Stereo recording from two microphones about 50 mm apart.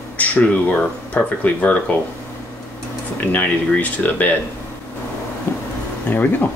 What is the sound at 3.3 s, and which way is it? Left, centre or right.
Speech, left.